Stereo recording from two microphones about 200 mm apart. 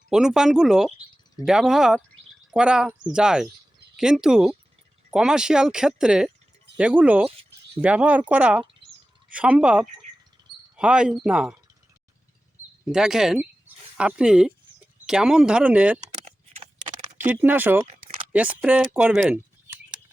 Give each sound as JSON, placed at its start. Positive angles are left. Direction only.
{"t": 0.1, "sound": "speech", "side_deg": -5}
{"t": 12.8, "sound": "speech", "side_deg": 0}
{"t": 16.2, "sound": "a sound", "side_deg": -30}
{"t": 17.2, "sound": "speech", "side_deg": -10}